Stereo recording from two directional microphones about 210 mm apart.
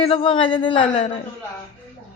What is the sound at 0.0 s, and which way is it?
A woman's voice, 25° left (ahead or behind).